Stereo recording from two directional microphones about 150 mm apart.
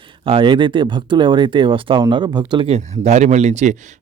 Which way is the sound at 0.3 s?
35° right (ahead or behind).